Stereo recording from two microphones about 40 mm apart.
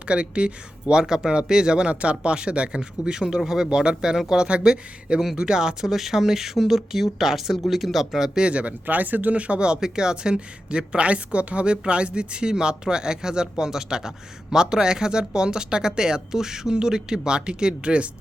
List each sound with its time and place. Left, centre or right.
0.0 s speech: right; by 8.3 s centre
8.4 s speech: right
8.9 s speech: right
9.3 s speech: right